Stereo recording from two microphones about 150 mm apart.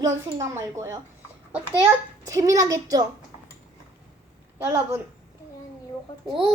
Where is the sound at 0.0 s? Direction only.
20° right (ahead or behind).